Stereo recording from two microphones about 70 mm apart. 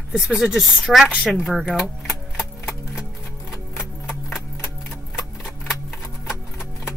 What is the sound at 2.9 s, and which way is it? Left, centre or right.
Music, centre.